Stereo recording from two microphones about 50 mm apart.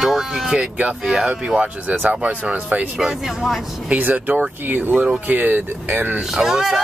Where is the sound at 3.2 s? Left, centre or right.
Centre.